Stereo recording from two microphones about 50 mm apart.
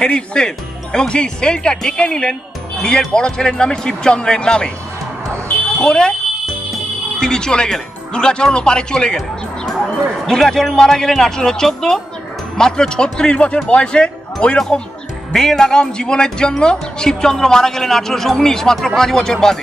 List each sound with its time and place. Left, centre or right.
0.0 s speech: centre
5.8 s speech: centre
7.2 s speech: centre
10.2 s speech: centre